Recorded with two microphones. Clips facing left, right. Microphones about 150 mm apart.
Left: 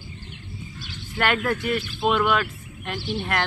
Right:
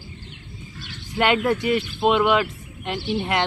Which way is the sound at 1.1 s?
15° right (ahead or behind).